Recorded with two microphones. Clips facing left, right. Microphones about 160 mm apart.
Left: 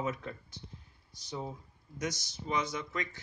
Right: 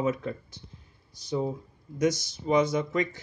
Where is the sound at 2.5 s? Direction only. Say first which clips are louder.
Right 11 dB; 50° right (ahead or behind).